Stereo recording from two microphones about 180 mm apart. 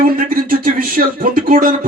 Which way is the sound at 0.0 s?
50° right (ahead or behind).